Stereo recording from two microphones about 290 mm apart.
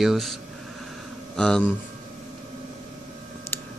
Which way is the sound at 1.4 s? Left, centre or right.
Centre.